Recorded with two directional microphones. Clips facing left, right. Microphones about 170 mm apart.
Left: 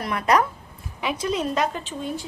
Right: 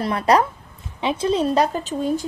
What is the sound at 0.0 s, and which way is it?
A woman's voice, 30° right (ahead or behind).